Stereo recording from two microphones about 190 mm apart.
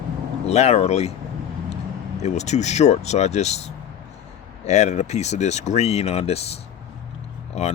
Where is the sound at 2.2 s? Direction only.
35° left (ahead or behind).